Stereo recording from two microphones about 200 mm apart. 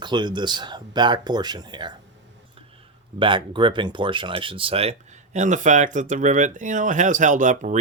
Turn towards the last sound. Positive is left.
turn(degrees=-40)  # may be behind; listen again after turning